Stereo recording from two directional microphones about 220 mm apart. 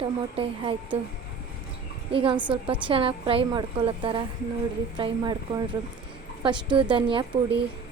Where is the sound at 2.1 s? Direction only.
25° right (ahead or behind).